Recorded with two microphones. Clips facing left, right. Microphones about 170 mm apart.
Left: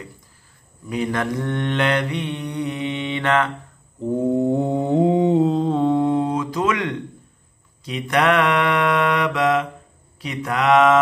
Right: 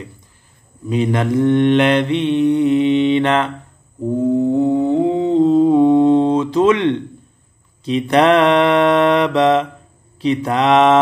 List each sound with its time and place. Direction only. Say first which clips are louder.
0.8 s mantra: right 6 dB; 20° right (ahead or behind)
4.4 s humming: right 5 dB; 15° left (ahead or behind)
5.4 s mantra: right 7 dB; centre (ahead or behind)
5.7 s a sound: right 7 dB; 15° right (ahead or behind)
7.8 s mantra: right 6 dB; 25° right (ahead or behind)